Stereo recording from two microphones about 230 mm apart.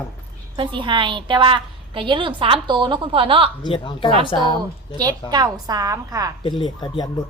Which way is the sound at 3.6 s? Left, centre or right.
Left.